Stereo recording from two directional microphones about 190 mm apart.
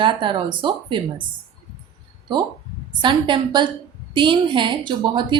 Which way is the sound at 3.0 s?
25° right (ahead or behind).